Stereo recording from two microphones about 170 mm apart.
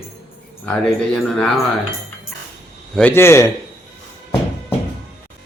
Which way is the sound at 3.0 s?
10° left (ahead or behind).